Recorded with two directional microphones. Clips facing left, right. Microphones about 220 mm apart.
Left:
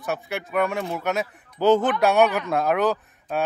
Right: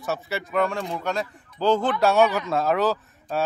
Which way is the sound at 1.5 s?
20° left (ahead or behind).